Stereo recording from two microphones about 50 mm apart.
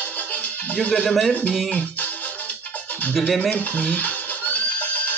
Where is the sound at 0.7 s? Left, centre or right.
Left.